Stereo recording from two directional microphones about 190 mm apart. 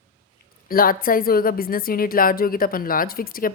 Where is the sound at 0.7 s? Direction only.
50° left (ahead or behind).